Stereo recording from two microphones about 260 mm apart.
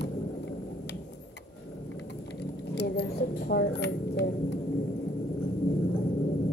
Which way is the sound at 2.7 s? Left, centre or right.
Left.